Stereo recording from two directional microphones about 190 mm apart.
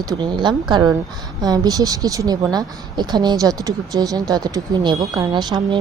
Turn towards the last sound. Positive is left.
turn(degrees=-20)  # may be behind; listen again after turning